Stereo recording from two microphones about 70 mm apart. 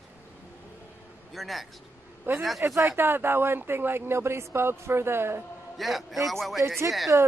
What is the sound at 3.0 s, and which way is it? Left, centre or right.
Speech, right.